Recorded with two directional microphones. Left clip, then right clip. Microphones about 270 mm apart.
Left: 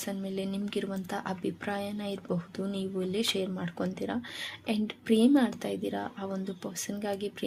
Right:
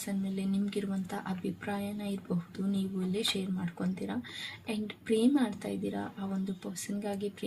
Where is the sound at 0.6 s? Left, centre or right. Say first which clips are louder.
Left 2 dB; left.